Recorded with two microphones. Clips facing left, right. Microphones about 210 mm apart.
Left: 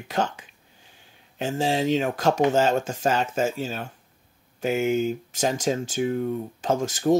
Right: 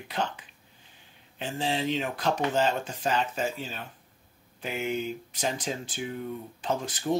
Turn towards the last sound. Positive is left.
turn(degrees=45)  # may be behind; listen again after turning